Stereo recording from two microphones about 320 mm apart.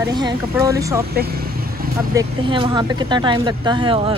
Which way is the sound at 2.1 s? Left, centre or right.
Centre.